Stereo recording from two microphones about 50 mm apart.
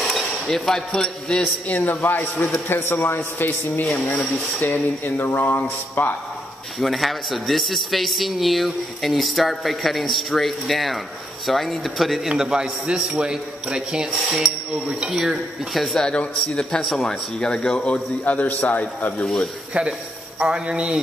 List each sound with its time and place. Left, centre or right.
0.0 s speech: centre
1.7 s speech: left
2.7 s a man's voice: left
3.8 s speech: left
6.8 s a man's voice: centre
12.3 s a man's voice: centre
14.4 s a man's voice: centre
15.7 s a man's voice: centre
16.0 s a man's voice: centre
16.8 s a man's voice: centre; by 19.2 s left
20.3 s speech: centre